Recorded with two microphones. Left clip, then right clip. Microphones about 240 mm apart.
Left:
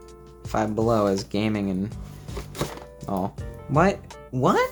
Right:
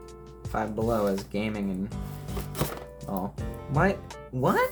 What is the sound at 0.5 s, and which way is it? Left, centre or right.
Speech, left.